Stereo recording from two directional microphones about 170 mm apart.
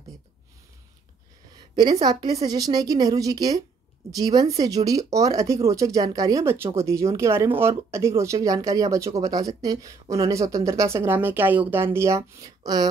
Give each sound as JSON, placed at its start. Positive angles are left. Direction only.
{"t": 2.0, "sound": "speech", "side_deg": -25}